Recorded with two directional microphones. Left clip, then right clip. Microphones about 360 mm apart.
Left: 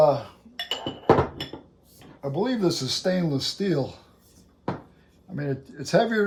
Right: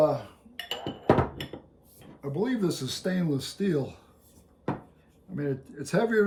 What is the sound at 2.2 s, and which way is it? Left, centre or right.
Speech, centre.